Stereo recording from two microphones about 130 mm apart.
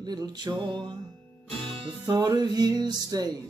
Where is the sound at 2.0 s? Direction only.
30° right (ahead or behind).